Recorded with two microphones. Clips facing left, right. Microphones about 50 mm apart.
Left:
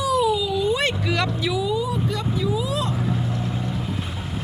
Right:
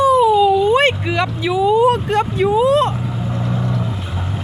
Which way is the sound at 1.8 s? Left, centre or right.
Right.